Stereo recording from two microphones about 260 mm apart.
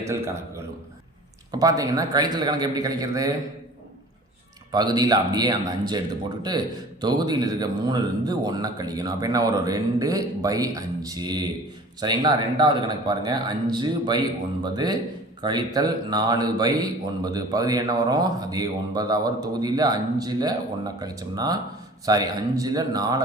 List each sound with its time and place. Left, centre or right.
0.0 s speech: centre
4.7 s speech: centre
7.0 s speech: centre